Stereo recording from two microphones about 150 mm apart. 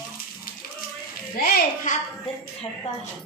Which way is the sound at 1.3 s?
80° left.